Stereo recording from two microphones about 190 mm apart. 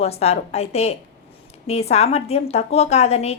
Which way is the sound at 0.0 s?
35° left (ahead or behind).